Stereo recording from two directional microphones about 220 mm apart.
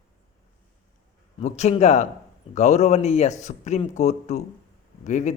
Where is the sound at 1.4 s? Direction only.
30° left (ahead or behind).